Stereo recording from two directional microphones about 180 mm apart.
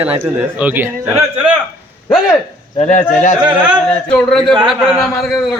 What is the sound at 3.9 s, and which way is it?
A man's voice, 5° left (ahead or behind).